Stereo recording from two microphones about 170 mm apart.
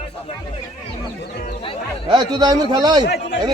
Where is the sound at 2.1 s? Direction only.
25° right (ahead or behind).